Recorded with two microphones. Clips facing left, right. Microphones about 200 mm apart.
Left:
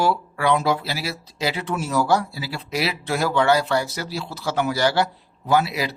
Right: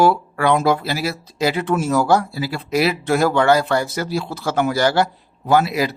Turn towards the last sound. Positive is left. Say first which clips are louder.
# right 4 dB
turn(degrees=-50)  # may be behind; listen again after turning